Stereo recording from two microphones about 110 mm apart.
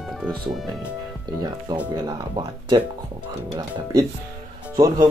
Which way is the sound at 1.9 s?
35° right (ahead or behind).